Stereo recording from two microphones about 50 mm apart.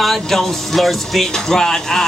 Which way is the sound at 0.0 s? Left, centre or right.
Centre.